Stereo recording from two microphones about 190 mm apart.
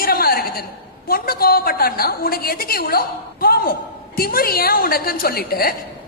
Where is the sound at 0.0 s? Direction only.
50° left (ahead or behind).